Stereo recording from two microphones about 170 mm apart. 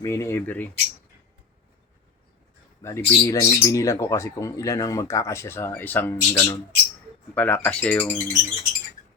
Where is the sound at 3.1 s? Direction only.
20° left (ahead or behind).